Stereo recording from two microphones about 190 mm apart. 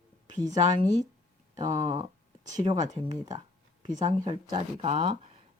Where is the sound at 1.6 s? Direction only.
30° right (ahead or behind).